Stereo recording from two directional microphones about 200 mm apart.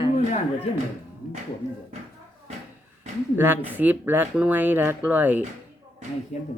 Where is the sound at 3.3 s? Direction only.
10° right (ahead or behind).